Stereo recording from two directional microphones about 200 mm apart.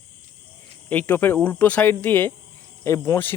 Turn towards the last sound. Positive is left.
turn(degrees=15)  # may be behind; listen again after turning